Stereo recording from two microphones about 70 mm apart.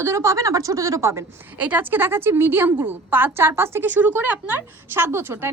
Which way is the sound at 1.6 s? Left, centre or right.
Right.